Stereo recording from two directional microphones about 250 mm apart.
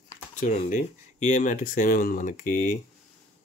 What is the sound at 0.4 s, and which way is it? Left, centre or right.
Speech, left.